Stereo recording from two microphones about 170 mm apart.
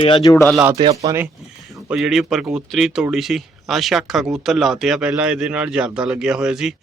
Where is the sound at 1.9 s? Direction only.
5° right (ahead or behind).